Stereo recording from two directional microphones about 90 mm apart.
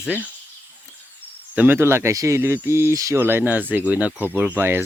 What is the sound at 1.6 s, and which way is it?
Speech, 25° right (ahead or behind).